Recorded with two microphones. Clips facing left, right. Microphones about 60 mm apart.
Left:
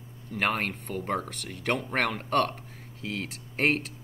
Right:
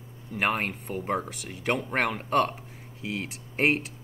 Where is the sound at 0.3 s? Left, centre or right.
Centre.